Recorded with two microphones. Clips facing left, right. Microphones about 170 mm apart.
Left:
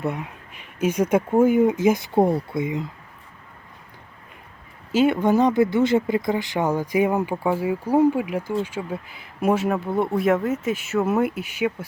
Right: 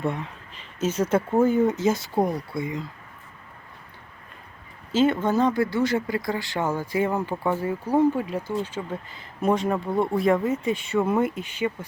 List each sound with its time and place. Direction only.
0.0 s speech: 10° left (ahead or behind)
2.1 s speech: 30° left (ahead or behind)
4.9 s speech: 10° left (ahead or behind)